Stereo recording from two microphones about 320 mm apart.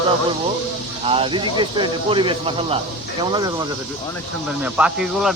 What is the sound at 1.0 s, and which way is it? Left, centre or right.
Speech, centre.